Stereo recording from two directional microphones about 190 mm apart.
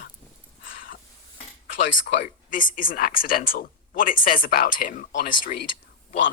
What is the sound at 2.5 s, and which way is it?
Speech, 45° left (ahead or behind).